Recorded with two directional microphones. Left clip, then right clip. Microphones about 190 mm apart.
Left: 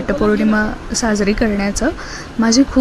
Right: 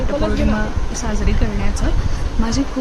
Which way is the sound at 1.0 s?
30° left (ahead or behind).